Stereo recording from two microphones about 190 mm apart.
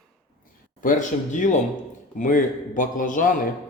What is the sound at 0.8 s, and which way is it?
A man's voice, 45° left (ahead or behind).